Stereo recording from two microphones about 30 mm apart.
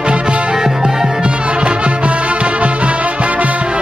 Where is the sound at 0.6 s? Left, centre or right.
Centre.